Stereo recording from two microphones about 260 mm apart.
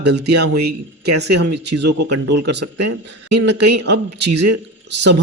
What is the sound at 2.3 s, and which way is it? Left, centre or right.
Speech, right.